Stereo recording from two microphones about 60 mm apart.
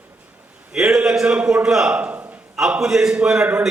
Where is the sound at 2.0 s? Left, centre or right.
Right.